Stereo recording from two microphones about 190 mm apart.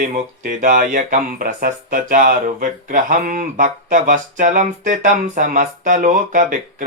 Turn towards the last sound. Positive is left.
turn(degrees=-45)  # may be behind; listen again after turning